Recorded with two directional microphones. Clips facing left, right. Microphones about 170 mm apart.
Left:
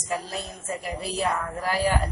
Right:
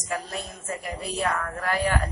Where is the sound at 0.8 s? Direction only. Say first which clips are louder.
Left 1 dB; 30° left (ahead or behind).